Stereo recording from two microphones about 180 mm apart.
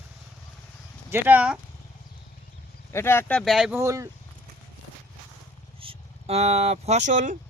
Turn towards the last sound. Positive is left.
turn(degrees=-45)  # may be behind; listen again after turning